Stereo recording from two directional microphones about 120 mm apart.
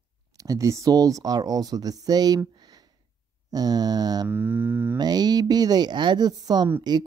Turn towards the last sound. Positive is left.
turn(degrees=-35)  # may be behind; listen again after turning